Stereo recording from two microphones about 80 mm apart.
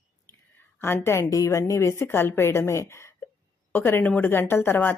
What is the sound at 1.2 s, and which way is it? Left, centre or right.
A woman's voice, left.